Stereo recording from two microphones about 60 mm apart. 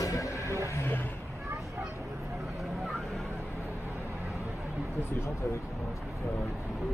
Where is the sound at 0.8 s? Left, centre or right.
Left.